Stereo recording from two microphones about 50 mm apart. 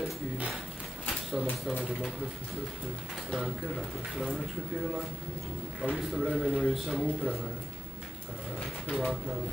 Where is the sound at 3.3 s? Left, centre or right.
Centre.